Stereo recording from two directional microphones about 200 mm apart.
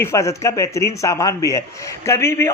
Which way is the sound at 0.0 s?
15° left (ahead or behind).